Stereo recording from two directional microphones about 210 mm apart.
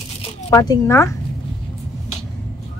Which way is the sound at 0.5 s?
15° left (ahead or behind).